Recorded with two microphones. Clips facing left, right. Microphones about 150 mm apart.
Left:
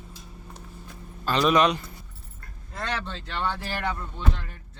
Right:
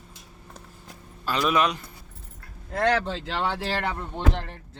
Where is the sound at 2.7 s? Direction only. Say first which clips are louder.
Right 10 dB; 65° right (ahead or behind).